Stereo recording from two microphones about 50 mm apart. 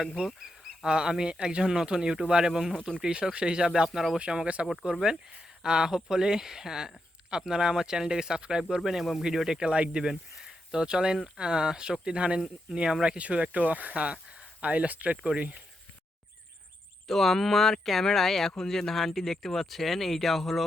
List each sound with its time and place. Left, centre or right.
0.3 s duck: centre
0.9 s speech: centre
2.5 s speech: centre
3.0 s speech: centre
3.8 s speech: centre
4.2 s speech: right
4.6 s speech: centre; by 15.6 s right
17.1 s speech: centre